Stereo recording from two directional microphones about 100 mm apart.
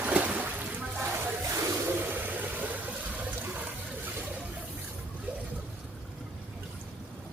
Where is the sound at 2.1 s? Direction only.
20° right (ahead or behind).